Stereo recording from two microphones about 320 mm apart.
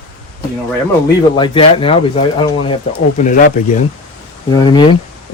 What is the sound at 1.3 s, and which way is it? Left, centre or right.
Speech, centre.